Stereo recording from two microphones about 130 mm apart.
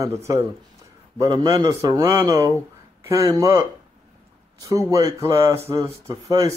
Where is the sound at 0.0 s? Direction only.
25° right (ahead or behind).